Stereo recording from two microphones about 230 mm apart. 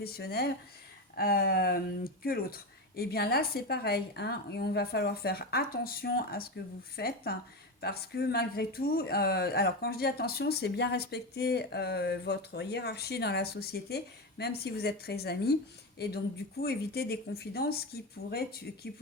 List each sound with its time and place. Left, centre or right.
0.0 s speech: left